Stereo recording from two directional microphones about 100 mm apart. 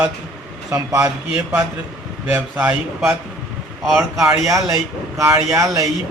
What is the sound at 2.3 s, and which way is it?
Speech, 25° right (ahead or behind).